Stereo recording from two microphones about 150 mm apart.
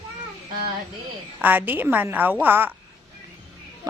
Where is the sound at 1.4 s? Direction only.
10° right (ahead or behind).